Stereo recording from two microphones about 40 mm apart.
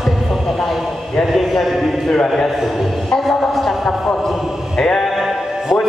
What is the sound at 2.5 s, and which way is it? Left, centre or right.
Speech, centre.